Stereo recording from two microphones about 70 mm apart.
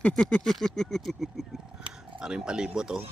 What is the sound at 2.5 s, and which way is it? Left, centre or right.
Speech, centre.